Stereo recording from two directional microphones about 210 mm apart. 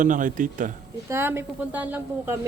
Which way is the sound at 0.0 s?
40° right (ahead or behind).